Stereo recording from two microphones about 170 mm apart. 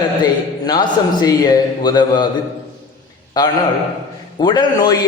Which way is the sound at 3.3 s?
25° left (ahead or behind).